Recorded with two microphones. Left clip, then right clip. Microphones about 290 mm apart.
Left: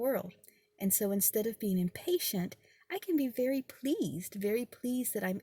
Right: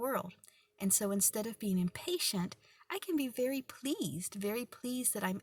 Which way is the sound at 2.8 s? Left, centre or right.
Right.